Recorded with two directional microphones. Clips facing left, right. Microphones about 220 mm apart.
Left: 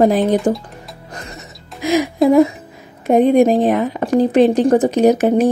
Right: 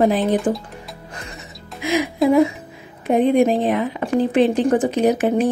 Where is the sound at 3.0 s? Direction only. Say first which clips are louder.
Left 4 dB; 45° left (ahead or behind).